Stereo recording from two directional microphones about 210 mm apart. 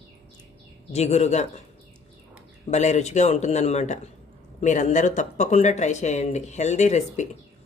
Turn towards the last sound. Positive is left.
turn(degrees=35)  # may be behind; listen again after turning